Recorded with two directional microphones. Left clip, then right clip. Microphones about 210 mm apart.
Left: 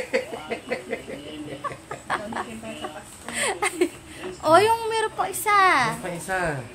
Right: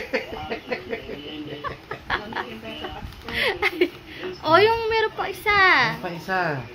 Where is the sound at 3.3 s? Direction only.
25° left (ahead or behind).